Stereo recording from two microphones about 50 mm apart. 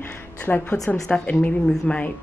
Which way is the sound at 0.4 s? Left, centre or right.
Left.